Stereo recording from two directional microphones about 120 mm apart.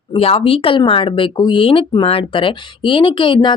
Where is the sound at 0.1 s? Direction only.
50° left (ahead or behind).